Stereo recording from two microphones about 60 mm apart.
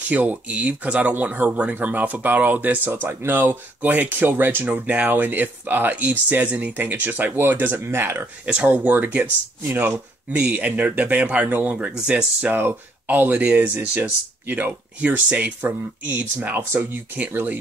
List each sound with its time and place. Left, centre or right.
0.1 s speech: right
4.6 s speech: right
8.5 s speech: right
12.5 s speech: right
13.7 s speech: right